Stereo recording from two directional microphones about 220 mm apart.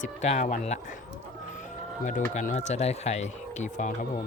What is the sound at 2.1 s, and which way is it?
Speech, 35° left (ahead or behind).